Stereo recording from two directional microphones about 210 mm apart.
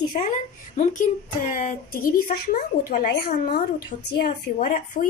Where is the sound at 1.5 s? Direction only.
40° left (ahead or behind).